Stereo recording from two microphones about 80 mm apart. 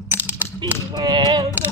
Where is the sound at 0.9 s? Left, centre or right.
Right.